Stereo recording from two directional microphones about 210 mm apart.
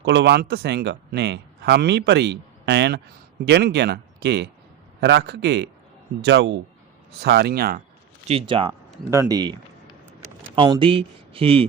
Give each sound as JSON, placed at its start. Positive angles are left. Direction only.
{"t": 0.0, "sound": "a man's voice", "side_deg": -55}
{"t": 8.3, "sound": "speech", "side_deg": -25}
{"t": 9.0, "sound": "speech", "side_deg": -15}